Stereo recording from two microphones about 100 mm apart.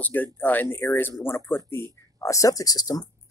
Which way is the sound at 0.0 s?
15° left (ahead or behind).